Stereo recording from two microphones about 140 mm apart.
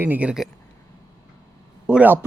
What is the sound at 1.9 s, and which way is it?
Speech, 10° right (ahead or behind).